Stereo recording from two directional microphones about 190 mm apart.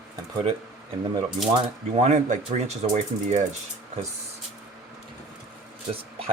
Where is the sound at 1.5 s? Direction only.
30° right (ahead or behind).